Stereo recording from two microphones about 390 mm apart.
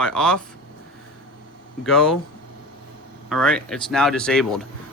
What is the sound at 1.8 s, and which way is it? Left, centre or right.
Speech, centre.